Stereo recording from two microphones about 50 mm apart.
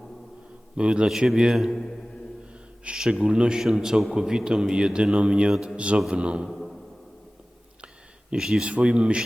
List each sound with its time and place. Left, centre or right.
0.8 s a man's voice: centre
2.8 s a man's voice: centre
8.3 s a man's voice: centre